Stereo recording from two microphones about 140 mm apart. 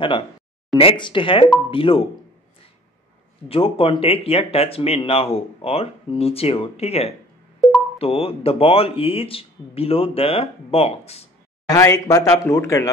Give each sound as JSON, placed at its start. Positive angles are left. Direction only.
{"t": 0.7, "sound": "speech", "side_deg": 35}
{"t": 3.4, "sound": "speech", "side_deg": 45}
{"t": 11.6, "sound": "speech", "side_deg": 25}